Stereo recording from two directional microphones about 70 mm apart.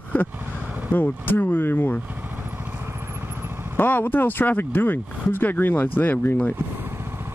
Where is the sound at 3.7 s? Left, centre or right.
Left.